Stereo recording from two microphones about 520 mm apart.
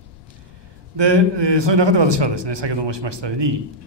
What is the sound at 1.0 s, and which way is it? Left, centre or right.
A man's voice, right.